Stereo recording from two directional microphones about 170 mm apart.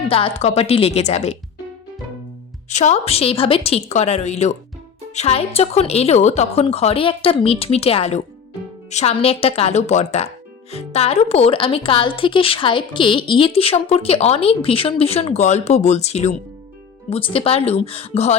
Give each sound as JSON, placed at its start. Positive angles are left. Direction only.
{"t": 0.1, "sound": "speech", "side_deg": 35}
{"t": 2.6, "sound": "speech", "side_deg": 45}